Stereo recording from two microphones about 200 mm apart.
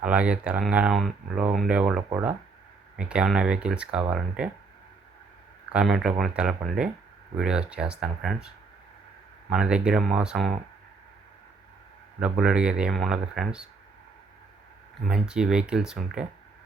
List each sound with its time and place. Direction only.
0.0 s speech: 5° right (ahead or behind)
5.7 s speech: centre (ahead or behind)
12.2 s speech: 5° right (ahead or behind)
15.0 s speech: 5° right (ahead or behind)